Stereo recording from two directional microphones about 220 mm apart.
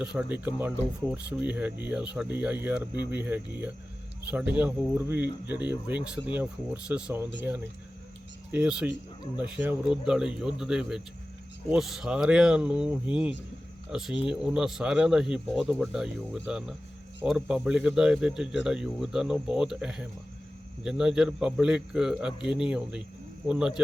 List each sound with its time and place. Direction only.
0.0 s speech: 5° right (ahead or behind)